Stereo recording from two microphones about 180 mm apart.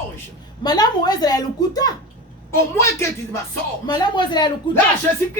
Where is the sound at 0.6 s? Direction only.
20° left (ahead or behind).